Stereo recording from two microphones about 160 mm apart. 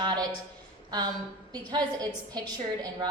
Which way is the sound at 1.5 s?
25° right (ahead or behind).